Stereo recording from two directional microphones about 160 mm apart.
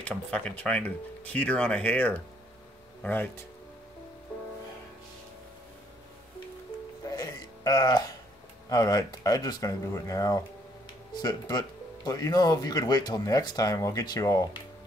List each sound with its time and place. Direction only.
0.0 s speech: 5° left (ahead or behind)
7.1 s music: 25° left (ahead or behind)
8.6 s speech: 25° left (ahead or behind)